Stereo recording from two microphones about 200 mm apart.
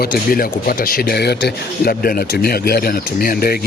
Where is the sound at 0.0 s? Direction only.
45° left (ahead or behind).